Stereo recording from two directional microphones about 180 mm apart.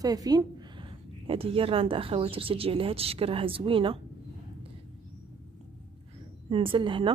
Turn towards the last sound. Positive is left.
turn(degrees=-30)  # may be behind; listen again after turning